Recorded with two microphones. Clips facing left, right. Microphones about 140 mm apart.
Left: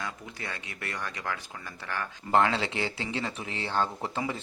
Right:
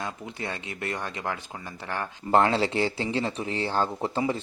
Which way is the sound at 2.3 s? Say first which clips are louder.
Right 3 dB; 35° right (ahead or behind).